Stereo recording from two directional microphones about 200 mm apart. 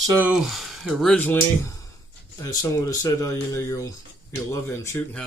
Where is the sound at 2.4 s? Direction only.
15° left (ahead or behind).